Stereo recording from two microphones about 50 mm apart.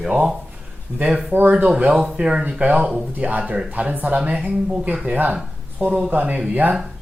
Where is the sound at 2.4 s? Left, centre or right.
Right.